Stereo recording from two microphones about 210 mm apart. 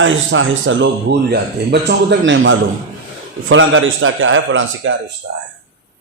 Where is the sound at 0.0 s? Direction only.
65° right (ahead or behind).